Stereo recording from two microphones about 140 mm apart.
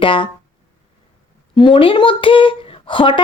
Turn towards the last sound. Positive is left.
turn(degrees=35)  # may be behind; listen again after turning